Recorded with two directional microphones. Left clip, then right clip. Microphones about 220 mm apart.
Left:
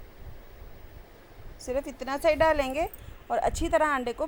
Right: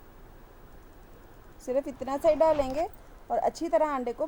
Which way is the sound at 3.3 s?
20° left (ahead or behind).